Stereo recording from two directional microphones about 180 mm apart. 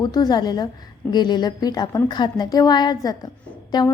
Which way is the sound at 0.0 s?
25° left (ahead or behind).